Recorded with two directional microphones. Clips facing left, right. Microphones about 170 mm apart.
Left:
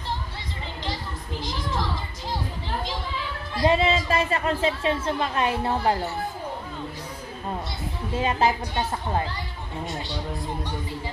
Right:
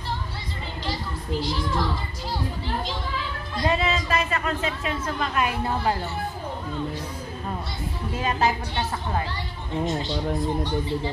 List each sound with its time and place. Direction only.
3.6 s speech: 30° left (ahead or behind)
8.2 s speech: 25° left (ahead or behind)